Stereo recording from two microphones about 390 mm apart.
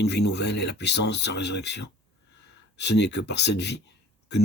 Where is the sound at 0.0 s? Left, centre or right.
Left.